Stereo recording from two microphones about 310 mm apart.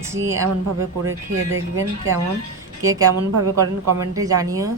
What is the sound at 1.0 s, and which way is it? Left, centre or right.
Speech, right.